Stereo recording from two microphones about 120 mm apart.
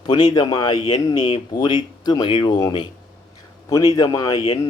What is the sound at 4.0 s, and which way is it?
Speech, 30° left (ahead or behind).